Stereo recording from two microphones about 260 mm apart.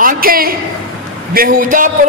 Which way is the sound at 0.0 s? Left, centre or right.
Right.